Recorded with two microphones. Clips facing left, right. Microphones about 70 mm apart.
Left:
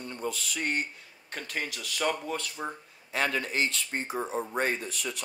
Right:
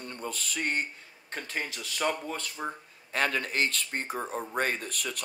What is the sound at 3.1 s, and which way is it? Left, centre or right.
Speech, right.